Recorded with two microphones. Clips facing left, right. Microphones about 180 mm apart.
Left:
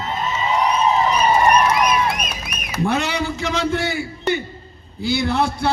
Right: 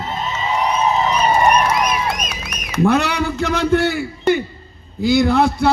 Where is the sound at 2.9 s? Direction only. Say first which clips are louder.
Right 4 dB; 60° right (ahead or behind).